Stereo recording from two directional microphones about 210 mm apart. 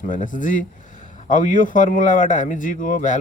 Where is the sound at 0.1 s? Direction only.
40° left (ahead or behind).